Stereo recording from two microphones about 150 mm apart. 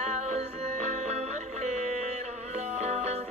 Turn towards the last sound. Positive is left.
turn(degrees=-45)  # may be behind; listen again after turning